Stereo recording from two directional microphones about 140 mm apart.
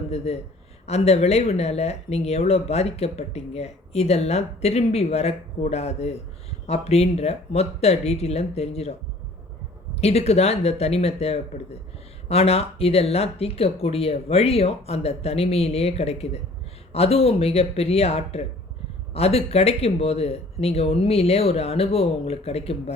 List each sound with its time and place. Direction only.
0.3 s speech: 50° left (ahead or behind)
10.0 s speech: 50° left (ahead or behind)